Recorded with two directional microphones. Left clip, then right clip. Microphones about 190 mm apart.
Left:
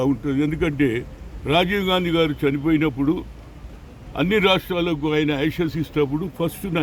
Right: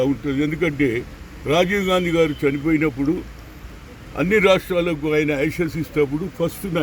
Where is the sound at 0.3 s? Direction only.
20° left (ahead or behind).